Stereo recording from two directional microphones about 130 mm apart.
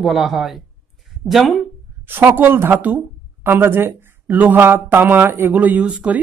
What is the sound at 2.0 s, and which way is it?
Speech, 15° right (ahead or behind).